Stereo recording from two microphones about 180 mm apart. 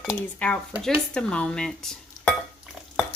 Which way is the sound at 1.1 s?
5° left (ahead or behind).